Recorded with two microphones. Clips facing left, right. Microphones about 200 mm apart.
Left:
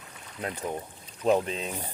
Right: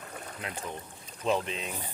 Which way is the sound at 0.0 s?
50° right (ahead or behind).